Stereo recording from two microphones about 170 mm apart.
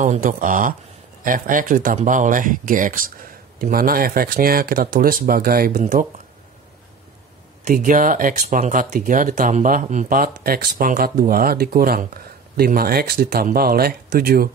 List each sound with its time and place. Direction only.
0.0 s speech: 50° right (ahead or behind)
5.8 s speech: 45° right (ahead or behind)
7.6 s speech: 50° right (ahead or behind)